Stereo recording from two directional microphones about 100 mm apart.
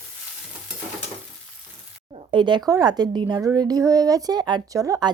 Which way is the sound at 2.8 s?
40° right (ahead or behind).